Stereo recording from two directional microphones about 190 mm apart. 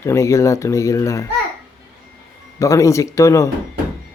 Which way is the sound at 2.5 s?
15° left (ahead or behind).